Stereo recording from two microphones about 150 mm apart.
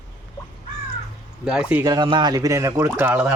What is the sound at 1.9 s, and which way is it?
Speech, 30° right (ahead or behind).